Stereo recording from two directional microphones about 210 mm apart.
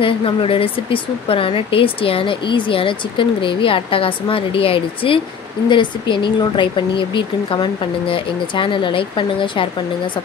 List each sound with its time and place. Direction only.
0.0 s speech: 25° left (ahead or behind)